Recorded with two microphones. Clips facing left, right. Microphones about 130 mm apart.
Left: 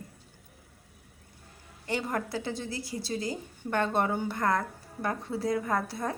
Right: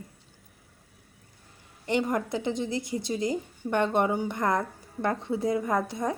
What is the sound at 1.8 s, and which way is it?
A woman's voice, 20° right (ahead or behind).